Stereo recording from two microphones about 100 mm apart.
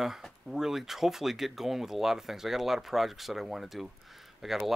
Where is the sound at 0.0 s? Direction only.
5° right (ahead or behind).